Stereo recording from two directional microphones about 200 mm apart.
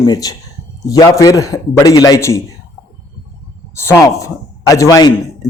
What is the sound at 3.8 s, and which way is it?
A man's voice, 15° left (ahead or behind).